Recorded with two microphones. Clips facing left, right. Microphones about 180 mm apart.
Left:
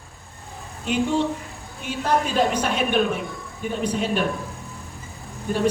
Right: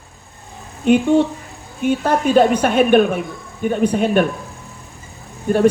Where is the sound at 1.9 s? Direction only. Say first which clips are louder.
Right 7 dB; 55° right (ahead or behind).